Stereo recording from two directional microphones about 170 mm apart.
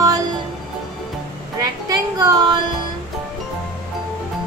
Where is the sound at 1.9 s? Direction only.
25° right (ahead or behind).